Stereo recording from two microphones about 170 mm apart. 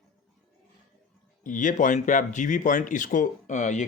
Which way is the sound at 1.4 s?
50° left (ahead or behind).